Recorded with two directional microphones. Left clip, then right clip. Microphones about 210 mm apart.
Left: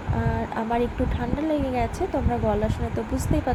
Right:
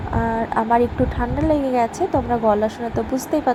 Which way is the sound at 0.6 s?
15° right (ahead or behind).